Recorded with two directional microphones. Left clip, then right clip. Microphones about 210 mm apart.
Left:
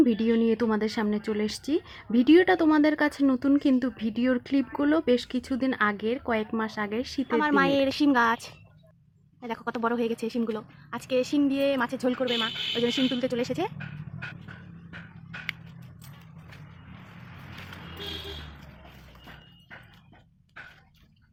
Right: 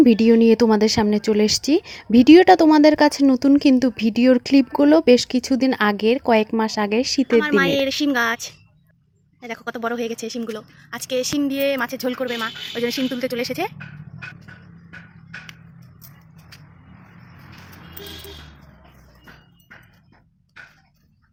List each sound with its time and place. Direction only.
0.0 s speech: 35° right (ahead or behind)
7.3 s a woman's voice: centre (ahead or behind)
9.6 s a woman's voice: centre (ahead or behind)